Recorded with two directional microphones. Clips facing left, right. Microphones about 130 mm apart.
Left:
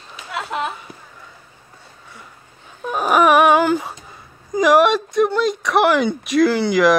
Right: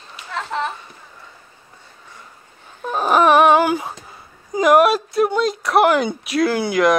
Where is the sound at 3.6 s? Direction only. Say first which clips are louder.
Left 1 dB; 5° right (ahead or behind).